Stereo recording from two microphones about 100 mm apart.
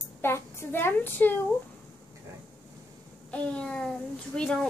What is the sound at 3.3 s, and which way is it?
Speech, 10° left (ahead or behind).